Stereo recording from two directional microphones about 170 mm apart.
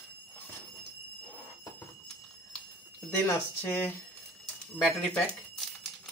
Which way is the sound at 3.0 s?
10° left (ahead or behind).